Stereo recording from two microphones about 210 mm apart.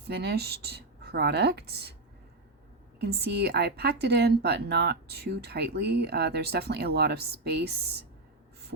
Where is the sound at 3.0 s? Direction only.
55° right (ahead or behind).